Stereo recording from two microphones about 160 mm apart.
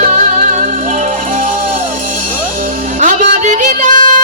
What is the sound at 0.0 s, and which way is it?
Music, 50° right (ahead or behind).